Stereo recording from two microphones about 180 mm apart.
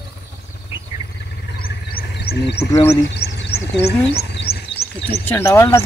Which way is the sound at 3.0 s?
70° left (ahead or behind).